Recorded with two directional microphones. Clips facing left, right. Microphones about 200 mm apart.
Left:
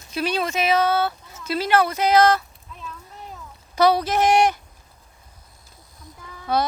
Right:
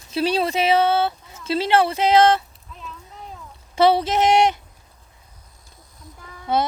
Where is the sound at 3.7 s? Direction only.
25° right (ahead or behind).